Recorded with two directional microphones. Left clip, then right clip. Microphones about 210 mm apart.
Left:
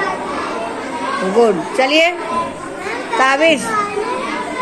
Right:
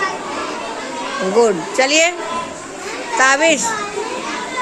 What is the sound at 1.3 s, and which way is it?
Speech, 20° right (ahead or behind).